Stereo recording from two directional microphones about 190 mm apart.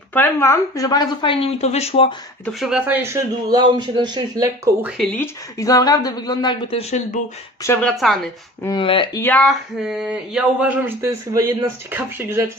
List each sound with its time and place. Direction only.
0.1 s a woman's voice: 10° left (ahead or behind); by 2.1 s 30° left (ahead or behind)
2.4 s speech: 5° right (ahead or behind); by 4.5 s 20° right (ahead or behind)
4.8 s a woman's voice: centre (ahead or behind); by 7.2 s 35° left (ahead or behind)
7.6 s speech: 10° left (ahead or behind)
7.9 s a woman's voice: centre (ahead or behind)
8.6 s a woman's voice: 25° left (ahead or behind)
9.2 s speech: 5° left (ahead or behind); by 12.4 s 10° right (ahead or behind)